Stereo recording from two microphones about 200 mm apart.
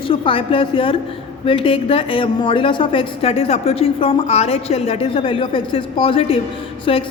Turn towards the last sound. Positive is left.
turn(degrees=25)  # may be behind; listen again after turning